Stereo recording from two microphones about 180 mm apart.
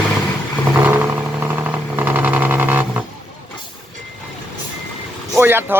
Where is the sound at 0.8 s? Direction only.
10° right (ahead or behind).